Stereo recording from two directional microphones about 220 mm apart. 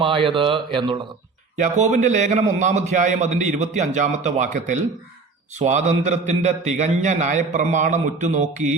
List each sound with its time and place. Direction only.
0.0 s speech: 25° right (ahead or behind)
1.5 s a man's voice: 35° right (ahead or behind)